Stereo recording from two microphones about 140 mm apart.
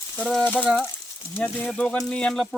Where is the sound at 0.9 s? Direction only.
15° left (ahead or behind).